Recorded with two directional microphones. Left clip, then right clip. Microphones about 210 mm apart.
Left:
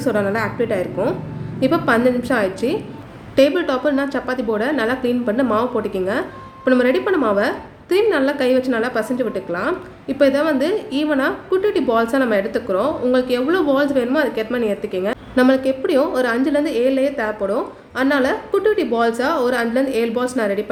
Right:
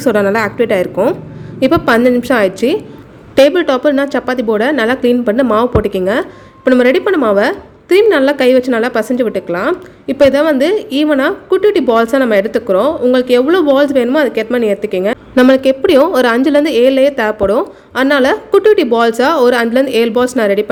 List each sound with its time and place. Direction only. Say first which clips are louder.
0.0 s a woman's voice: right 8 dB; 35° right (ahead or behind)